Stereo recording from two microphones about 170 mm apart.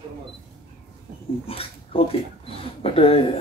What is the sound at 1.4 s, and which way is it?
Speech, 35° left (ahead or behind).